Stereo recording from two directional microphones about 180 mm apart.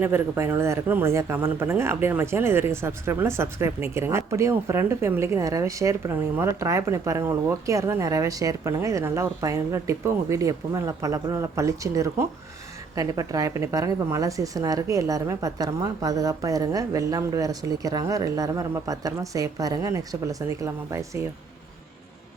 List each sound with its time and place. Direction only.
0.0 s a woman's voice: 10° right (ahead or behind)